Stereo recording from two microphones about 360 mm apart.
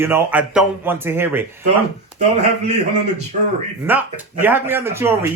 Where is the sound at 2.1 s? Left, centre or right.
Centre.